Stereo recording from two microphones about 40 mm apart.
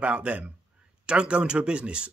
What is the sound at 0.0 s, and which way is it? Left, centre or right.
A man's voice, right.